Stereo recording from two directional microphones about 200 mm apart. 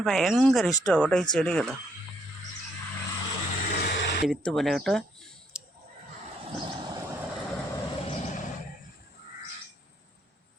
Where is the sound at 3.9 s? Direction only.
60° left (ahead or behind).